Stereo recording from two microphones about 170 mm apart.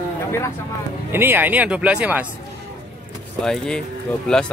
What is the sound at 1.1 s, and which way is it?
Speech, 10° right (ahead or behind).